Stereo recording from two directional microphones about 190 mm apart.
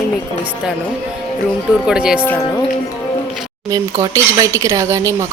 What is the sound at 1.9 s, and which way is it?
Speech, 5° right (ahead or behind).